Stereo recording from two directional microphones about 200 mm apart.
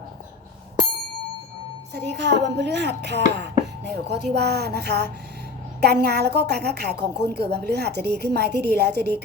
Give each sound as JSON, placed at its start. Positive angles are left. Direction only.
{"t": 1.9, "sound": "a woman's voice", "side_deg": -55}